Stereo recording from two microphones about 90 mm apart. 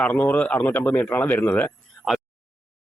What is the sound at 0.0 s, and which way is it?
Speech, 20° left (ahead or behind).